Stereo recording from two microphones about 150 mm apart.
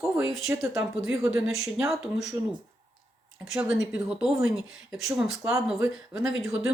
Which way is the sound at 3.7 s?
5° right (ahead or behind).